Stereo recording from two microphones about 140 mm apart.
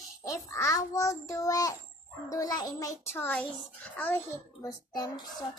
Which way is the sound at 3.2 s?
10° left (ahead or behind).